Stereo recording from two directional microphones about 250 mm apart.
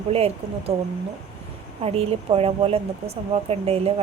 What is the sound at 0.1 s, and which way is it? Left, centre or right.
Speech, right.